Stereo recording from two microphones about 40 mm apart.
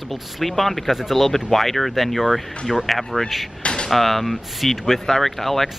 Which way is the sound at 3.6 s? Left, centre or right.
Left.